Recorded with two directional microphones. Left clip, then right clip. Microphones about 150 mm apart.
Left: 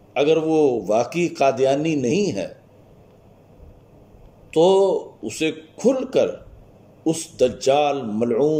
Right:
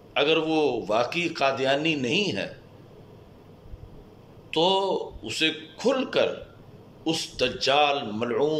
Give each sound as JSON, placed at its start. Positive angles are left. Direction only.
{"t": 0.1, "sound": "a man's voice", "side_deg": 40}
{"t": 4.5, "sound": "a man's voice", "side_deg": 40}